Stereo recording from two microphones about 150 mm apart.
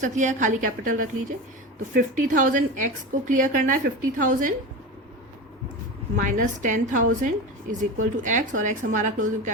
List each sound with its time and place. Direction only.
0.0 s a woman's voice: 55° right (ahead or behind)
6.2 s a woman's voice: 55° right (ahead or behind)